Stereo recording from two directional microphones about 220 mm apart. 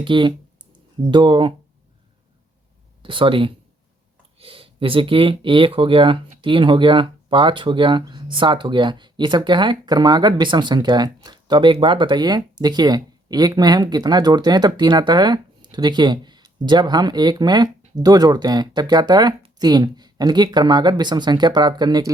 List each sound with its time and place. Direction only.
0.0 s speech: 20° right (ahead or behind)
3.0 s speech: 25° right (ahead or behind)